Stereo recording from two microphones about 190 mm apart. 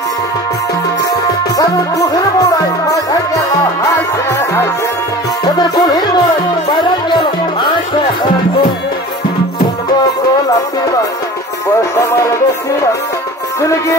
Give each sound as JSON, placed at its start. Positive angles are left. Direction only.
{"t": 1.6, "sound": "music", "side_deg": 20}